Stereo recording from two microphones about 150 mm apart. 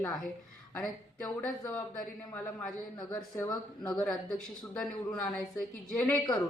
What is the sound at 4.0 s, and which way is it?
A man's voice, 5° left (ahead or behind).